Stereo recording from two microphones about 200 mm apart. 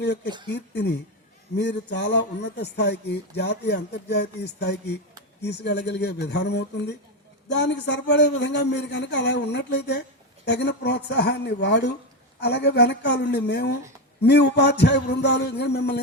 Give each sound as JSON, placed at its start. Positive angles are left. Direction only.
{"t": 0.4, "sound": "speech", "side_deg": 60}